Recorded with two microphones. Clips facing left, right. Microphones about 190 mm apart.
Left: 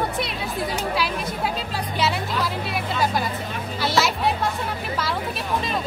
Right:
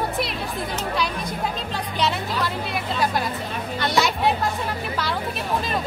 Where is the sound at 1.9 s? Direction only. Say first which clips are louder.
Even; 5° left (ahead or behind).